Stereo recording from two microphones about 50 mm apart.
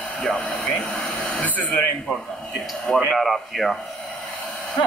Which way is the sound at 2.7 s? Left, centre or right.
Centre.